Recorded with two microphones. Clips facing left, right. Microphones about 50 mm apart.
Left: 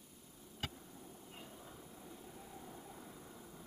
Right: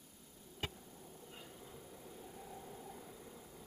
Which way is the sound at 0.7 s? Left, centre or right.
Centre.